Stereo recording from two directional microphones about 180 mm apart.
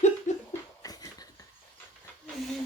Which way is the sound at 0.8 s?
20° left (ahead or behind).